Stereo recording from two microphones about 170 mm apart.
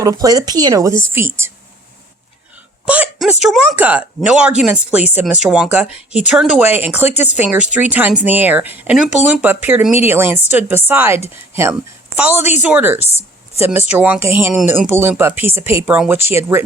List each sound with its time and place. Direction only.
0.0 s a woman's voice: 20° right (ahead or behind)
2.8 s a woman's voice: 10° right (ahead or behind)
13.1 s a sound: 40° left (ahead or behind)
13.7 s speech: 10° right (ahead or behind)